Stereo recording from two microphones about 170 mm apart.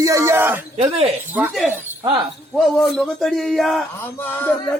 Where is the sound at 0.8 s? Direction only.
35° right (ahead or behind).